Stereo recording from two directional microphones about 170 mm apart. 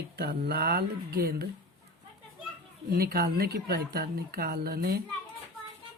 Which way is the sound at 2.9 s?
65° right (ahead or behind).